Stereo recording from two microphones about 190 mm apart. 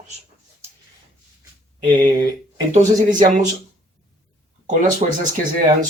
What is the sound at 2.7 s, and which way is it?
Speech, 45° right (ahead or behind).